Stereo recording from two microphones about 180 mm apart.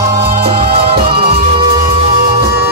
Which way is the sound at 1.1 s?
30° right (ahead or behind).